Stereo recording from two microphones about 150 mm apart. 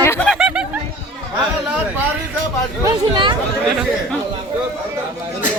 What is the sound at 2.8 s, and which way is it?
Speech, 30° right (ahead or behind).